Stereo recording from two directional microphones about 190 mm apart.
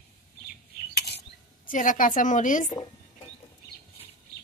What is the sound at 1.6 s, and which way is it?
A woman's voice, 45° left (ahead or behind).